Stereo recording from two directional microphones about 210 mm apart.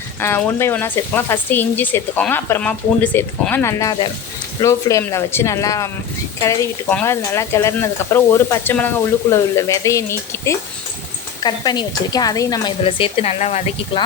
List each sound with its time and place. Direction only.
0.2 s a woman's voice: 10° left (ahead or behind); by 14.0 s 30° left (ahead or behind)